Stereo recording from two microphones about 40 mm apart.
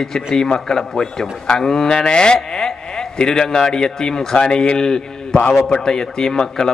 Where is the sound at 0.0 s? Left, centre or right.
Centre.